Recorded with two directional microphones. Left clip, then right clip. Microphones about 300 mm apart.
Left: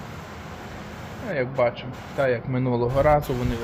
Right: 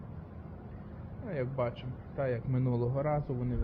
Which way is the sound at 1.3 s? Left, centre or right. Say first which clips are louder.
Left 12 dB; centre.